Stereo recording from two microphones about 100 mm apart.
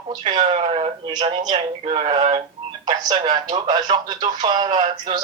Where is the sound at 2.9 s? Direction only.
45° right (ahead or behind).